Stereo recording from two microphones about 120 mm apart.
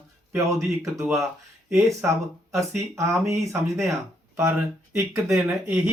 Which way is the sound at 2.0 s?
15° right (ahead or behind).